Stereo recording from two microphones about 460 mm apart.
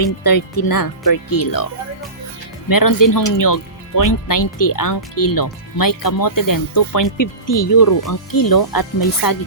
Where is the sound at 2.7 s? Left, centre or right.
Left.